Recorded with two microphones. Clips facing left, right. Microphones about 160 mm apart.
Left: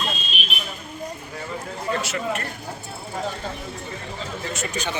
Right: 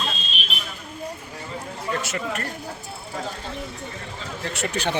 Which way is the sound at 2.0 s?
45° right (ahead or behind).